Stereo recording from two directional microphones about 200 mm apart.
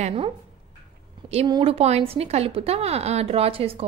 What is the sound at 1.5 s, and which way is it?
A woman's voice, 30° right (ahead or behind).